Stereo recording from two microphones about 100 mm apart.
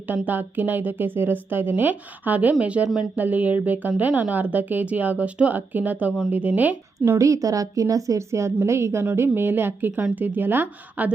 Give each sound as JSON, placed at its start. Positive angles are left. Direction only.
{"t": 0.1, "sound": "a woman's voice", "side_deg": -20}
{"t": 7.2, "sound": "a woman's voice", "side_deg": -35}